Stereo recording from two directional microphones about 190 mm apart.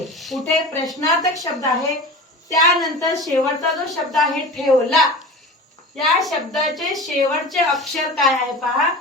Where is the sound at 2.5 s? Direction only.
20° left (ahead or behind).